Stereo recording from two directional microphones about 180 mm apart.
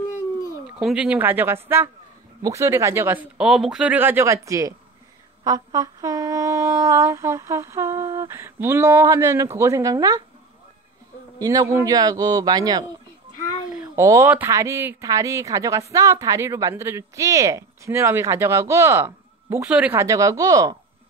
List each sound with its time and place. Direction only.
0.7 s speech: 5° right (ahead or behind)
11.3 s speech: 20° right (ahead or behind)